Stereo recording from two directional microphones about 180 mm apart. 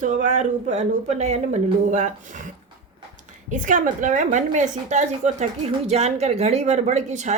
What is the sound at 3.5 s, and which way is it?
A woman's voice, 45° right (ahead or behind).